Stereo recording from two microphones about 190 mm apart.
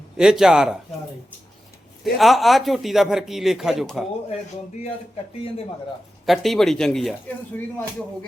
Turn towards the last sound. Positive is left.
turn(degrees=5)  # may be behind; listen again after turning